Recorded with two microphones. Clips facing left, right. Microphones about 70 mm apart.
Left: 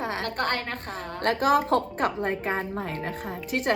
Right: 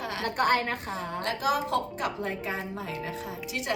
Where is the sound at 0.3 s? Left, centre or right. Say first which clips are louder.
Right 3 dB; centre.